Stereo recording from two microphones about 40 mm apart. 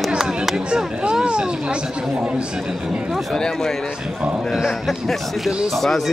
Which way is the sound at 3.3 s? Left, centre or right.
Centre.